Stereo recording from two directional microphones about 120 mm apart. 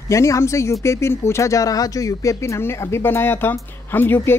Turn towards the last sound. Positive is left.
turn(degrees=15)  # may be behind; listen again after turning